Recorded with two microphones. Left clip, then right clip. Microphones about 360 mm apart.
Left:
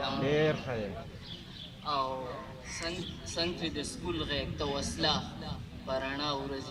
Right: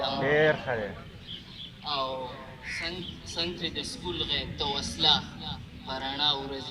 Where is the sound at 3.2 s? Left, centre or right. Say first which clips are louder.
Right 2 dB; centre.